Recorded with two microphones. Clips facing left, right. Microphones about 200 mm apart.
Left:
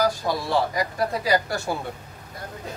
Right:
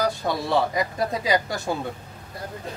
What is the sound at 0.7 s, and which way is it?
Speech, 20° right (ahead or behind).